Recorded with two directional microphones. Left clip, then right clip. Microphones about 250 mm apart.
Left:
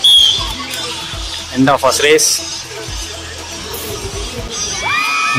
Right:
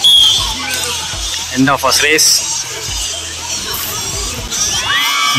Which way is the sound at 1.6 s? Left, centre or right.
Centre.